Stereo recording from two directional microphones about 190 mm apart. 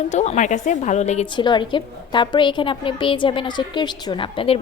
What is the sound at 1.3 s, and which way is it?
A woman's voice, 25° left (ahead or behind).